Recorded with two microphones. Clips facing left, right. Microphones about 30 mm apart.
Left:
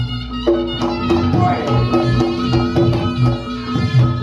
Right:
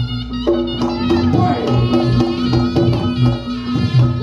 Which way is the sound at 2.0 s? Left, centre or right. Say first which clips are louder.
Right 1 dB; right.